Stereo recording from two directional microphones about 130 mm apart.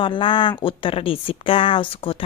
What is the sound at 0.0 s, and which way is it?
Speech, 40° left (ahead or behind).